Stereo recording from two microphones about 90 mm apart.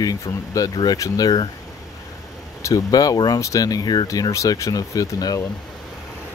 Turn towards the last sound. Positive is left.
turn(degrees=45)  # may be behind; listen again after turning